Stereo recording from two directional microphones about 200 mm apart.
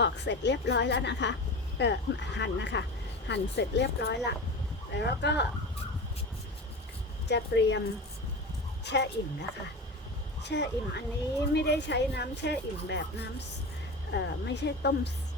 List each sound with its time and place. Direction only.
0.0 s speech: 60° left (ahead or behind)
7.3 s speech: 60° left (ahead or behind)
8.8 s speech: 60° left (ahead or behind)